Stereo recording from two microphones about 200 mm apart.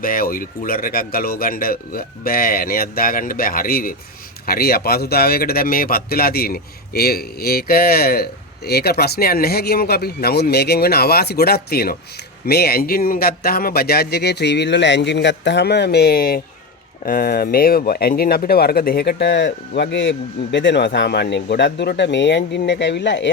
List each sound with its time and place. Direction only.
0.0 s a man's voice: 45° left (ahead or behind); by 23.3 s 60° left (ahead or behind)